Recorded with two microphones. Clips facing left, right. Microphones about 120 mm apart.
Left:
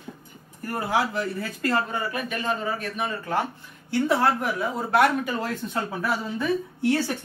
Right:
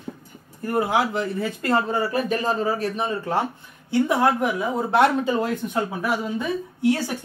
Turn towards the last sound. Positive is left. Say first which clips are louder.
# right 2 dB
turn(degrees=-15)  # may be behind; listen again after turning